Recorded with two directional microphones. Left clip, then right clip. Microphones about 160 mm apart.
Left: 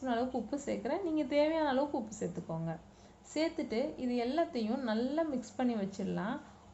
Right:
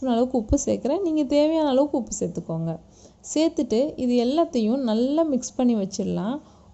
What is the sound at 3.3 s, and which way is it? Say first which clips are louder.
A woman's voice: right 12 dB; 35° right (ahead or behind).